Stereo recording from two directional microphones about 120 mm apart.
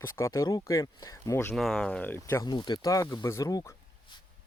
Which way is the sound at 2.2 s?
25° left (ahead or behind).